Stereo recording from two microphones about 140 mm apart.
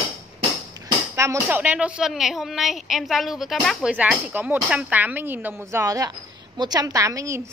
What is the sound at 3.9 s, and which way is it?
A woman's voice, 10° right (ahead or behind).